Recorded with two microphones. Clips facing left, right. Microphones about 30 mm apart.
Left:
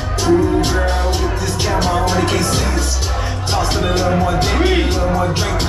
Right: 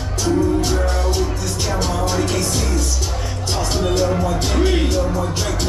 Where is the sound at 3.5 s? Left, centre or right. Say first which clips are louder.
Left 2 dB; left.